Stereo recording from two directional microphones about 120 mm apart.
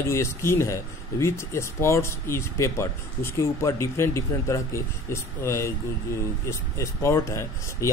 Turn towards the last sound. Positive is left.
turn(degrees=25)  # may be behind; listen again after turning